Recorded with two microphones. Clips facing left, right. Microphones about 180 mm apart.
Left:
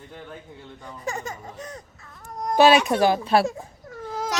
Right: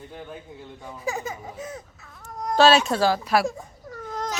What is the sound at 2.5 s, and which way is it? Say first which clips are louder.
Speech: left 1 dB; 15° left (ahead or behind).